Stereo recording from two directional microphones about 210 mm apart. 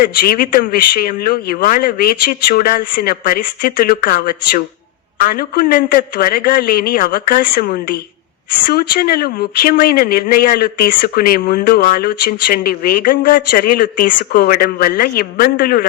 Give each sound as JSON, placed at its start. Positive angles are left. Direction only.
{"t": 0.0, "sound": "speech", "side_deg": 45}